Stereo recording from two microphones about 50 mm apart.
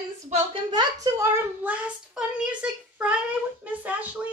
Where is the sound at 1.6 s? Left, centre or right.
Right.